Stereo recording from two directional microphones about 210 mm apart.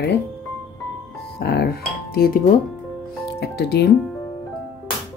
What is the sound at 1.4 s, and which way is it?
Speech, 50° left (ahead or behind).